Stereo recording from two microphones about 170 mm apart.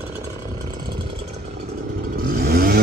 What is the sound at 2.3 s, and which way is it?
Vehicle, 65° right (ahead or behind).